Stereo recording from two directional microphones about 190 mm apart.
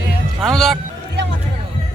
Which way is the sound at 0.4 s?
Centre (ahead or behind).